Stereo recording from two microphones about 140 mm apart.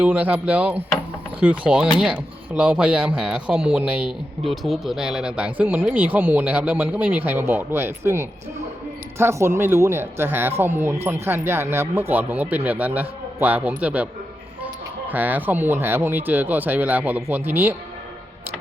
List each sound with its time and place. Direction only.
0.0 s speech: 10° right (ahead or behind)
4.4 s speech: centre (ahead or behind)